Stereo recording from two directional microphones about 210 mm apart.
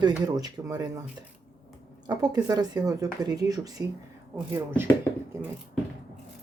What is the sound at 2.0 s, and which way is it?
Speech, 20° right (ahead or behind).